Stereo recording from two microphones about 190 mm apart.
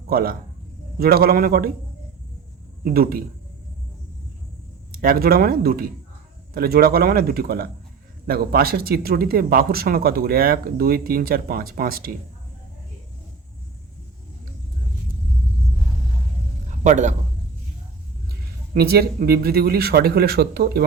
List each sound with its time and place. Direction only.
0.1 s speech: 50° right (ahead or behind)
2.8 s speech: 50° right (ahead or behind)
4.9 s speech: 50° right (ahead or behind)
16.8 s a man's voice: 40° right (ahead or behind)
18.7 s speech: 55° right (ahead or behind)